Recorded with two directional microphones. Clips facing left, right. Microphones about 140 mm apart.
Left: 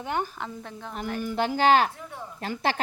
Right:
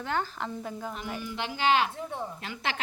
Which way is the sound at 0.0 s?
20° left (ahead or behind).